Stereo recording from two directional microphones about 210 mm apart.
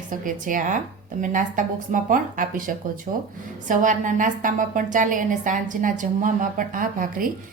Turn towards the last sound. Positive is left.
turn(degrees=-40)  # may be behind; listen again after turning